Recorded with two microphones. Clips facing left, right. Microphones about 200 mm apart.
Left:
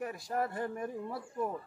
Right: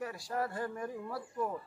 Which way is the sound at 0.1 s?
20° left (ahead or behind).